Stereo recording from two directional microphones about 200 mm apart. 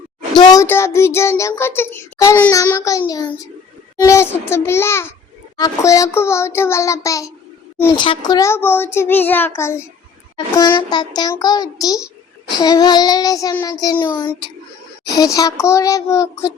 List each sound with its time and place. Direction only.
0.3 s speech: 20° left (ahead or behind)
10.8 s child singing: 20° left (ahead or behind)
14.0 s speech: 10° left (ahead or behind)